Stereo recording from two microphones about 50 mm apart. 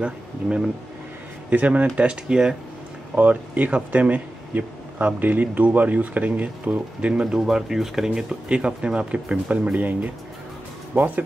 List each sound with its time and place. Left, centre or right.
0.0 s speech: centre
3.2 s speech: right
7.2 s speech: centre
8.5 s speech: right